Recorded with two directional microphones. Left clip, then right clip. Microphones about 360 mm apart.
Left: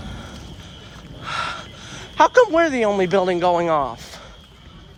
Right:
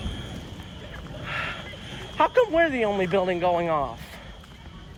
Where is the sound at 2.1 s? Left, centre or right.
Centre.